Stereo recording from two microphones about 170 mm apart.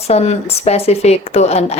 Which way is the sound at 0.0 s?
40° left (ahead or behind).